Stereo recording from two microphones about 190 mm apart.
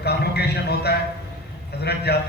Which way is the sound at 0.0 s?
60° left (ahead or behind).